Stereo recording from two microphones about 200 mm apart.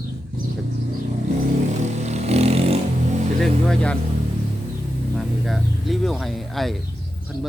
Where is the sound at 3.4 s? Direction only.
Centre (ahead or behind).